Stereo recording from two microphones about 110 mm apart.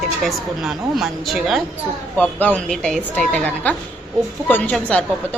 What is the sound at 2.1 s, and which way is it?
Speech, 15° left (ahead or behind).